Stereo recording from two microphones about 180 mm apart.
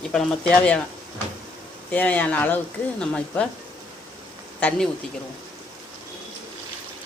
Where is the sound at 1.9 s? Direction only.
10° left (ahead or behind).